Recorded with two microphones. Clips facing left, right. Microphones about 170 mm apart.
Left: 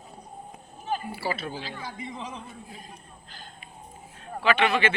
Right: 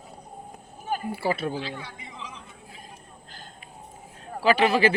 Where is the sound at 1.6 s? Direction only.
40° left (ahead or behind).